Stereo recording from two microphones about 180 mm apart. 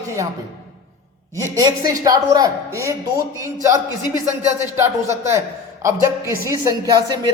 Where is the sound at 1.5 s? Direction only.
20° right (ahead or behind).